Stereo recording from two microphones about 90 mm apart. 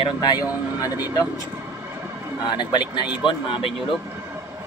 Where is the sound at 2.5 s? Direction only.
60° left (ahead or behind).